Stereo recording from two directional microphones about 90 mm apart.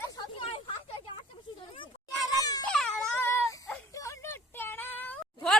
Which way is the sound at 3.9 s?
35° left (ahead or behind).